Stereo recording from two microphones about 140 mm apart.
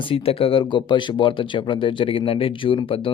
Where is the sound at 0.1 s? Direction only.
40° left (ahead or behind).